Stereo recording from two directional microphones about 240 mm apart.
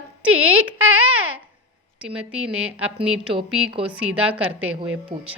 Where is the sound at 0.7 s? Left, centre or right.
Right.